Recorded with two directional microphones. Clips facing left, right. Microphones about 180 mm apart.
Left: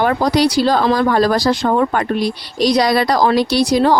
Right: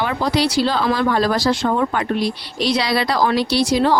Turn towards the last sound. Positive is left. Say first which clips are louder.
# left 3 dB
turn(degrees=40)  # may be behind; listen again after turning